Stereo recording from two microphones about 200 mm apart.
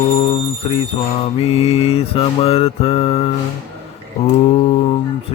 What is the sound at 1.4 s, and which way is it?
Mantra, 30° left (ahead or behind).